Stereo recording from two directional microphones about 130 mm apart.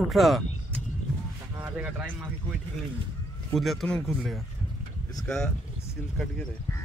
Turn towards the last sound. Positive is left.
turn(degrees=5)  # may be behind; listen again after turning